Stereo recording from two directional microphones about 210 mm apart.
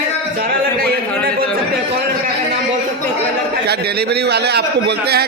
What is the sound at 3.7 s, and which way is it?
A man's voice, 50° right (ahead or behind).